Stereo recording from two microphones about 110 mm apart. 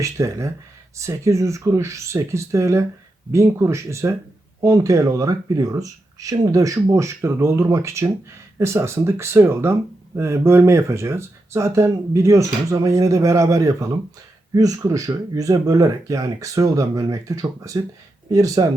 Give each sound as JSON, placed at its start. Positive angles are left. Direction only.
{"t": 0.0, "sound": "speech", "side_deg": -30}